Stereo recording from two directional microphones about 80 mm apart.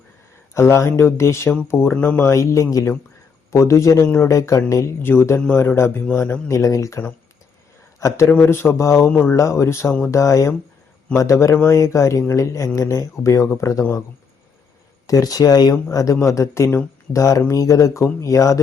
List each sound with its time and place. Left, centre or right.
0.5 s speech: left
2.2 s a man's voice: left
9.0 s speech: centre
9.3 s speech: left
15.0 s speech: left